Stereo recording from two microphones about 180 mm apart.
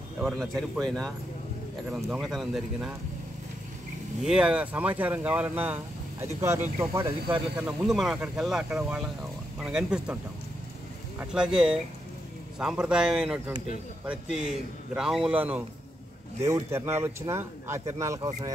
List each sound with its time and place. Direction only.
0.2 s speech: centre (ahead or behind)
4.2 s speech: 5° right (ahead or behind)
7.6 s speech: centre (ahead or behind)
11.1 s speech: 5° right (ahead or behind)